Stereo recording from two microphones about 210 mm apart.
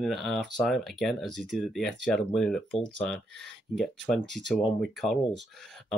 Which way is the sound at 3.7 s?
5° left (ahead or behind).